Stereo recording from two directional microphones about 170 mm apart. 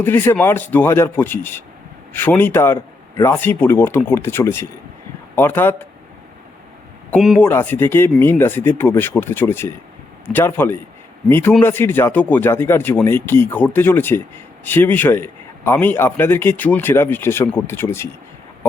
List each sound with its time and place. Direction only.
0.0 s a man's voice: 15° left (ahead or behind)
7.1 s speech: centre (ahead or behind)
7.3 s a man's voice: 10° left (ahead or behind)